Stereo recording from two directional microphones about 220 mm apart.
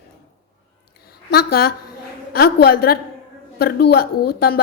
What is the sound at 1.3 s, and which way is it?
A woman's voice, 45° left (ahead or behind).